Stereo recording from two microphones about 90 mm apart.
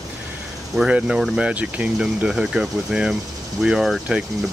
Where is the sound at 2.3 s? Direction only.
5° right (ahead or behind).